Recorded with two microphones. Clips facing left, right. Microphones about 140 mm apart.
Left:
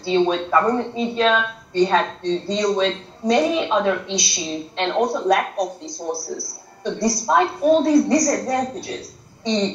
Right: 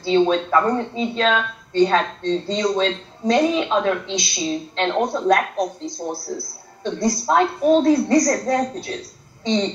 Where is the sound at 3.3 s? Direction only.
Centre (ahead or behind).